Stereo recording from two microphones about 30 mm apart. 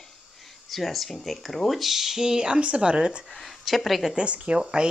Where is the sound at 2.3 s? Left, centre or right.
Right.